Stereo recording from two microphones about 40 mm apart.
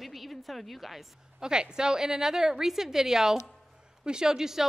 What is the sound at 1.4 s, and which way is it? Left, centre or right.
A woman's voice, centre.